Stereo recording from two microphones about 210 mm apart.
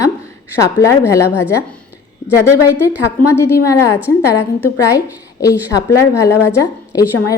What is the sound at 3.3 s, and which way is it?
Speech, 15° left (ahead or behind).